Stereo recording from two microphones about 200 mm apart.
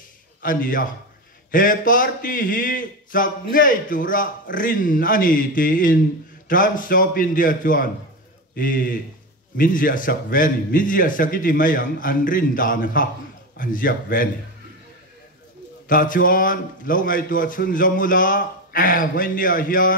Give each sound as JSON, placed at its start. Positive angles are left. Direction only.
{"t": 0.4, "sound": "a man's voice", "side_deg": 45}
{"t": 15.9, "sound": "a man's voice", "side_deg": 45}